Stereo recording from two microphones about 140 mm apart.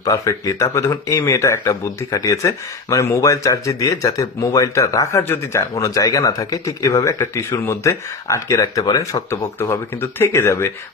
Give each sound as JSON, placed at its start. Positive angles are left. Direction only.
{"t": 0.0, "sound": "speech", "side_deg": 25}